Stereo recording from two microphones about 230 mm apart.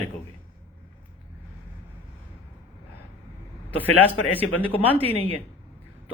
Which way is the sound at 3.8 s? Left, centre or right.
Centre.